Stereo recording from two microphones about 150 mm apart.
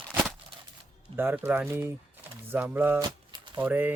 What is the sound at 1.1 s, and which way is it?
Speech, 15° right (ahead or behind).